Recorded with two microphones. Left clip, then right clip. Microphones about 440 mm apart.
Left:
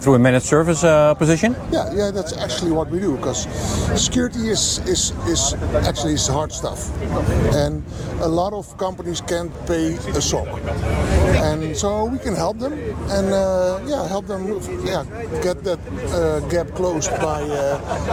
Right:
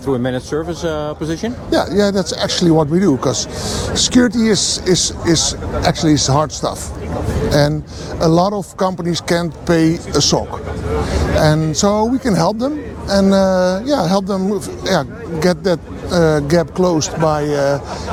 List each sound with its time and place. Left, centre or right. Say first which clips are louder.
0.0 s speech: left 4 dB; left
1.7 s speech: right 6 dB; right
8.2 s speech: right 6 dB; right
11.4 s speech: right 6 dB; right